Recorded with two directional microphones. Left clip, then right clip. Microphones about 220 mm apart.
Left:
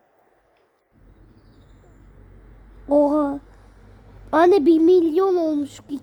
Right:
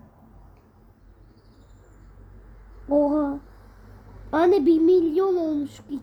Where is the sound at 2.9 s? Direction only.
50° left (ahead or behind).